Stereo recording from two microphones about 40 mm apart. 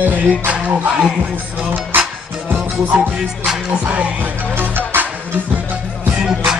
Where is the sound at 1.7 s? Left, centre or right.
Right.